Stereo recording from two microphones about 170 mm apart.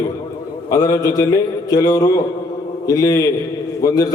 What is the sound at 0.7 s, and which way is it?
A man's voice, 20° left (ahead or behind).